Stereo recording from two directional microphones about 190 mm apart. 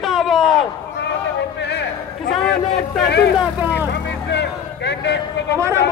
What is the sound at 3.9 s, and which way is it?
Vehicle, 65° left (ahead or behind).